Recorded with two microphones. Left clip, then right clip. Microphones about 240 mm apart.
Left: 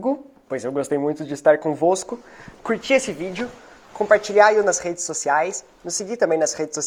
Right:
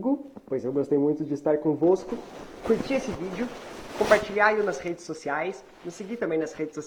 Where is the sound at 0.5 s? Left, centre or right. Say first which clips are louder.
Left 2 dB; left.